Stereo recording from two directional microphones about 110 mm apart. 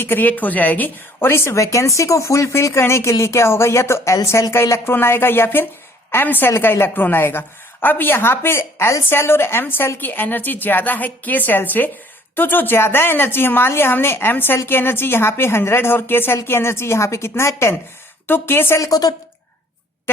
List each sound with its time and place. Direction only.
0.0 s a woman's voice: 15° left (ahead or behind)
18.9 s a woman's voice: 35° left (ahead or behind)